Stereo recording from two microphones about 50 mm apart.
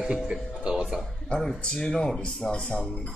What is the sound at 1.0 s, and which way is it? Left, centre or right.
Speech, centre.